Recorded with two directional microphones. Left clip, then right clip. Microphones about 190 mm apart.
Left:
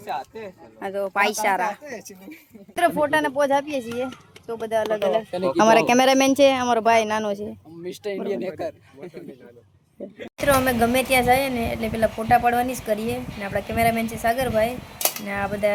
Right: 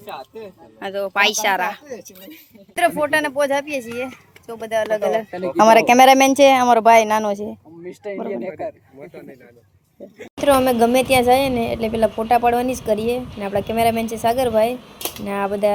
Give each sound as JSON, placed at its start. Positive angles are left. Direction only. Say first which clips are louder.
{"t": 0.8, "sound": "speech", "louder": "right 4 dB", "side_deg": 5}
{"t": 4.9, "sound": "speech", "louder": "right 2 dB", "side_deg": -40}
{"t": 5.5, "sound": "speech", "louder": "right 6 dB", "side_deg": -15}
{"t": 7.9, "sound": "speech", "louder": "even", "side_deg": -5}
{"t": 10.3, "sound": "speech", "louder": "right 4 dB", "side_deg": -15}